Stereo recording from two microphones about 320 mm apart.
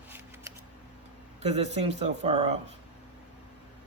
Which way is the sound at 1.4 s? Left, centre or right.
Centre.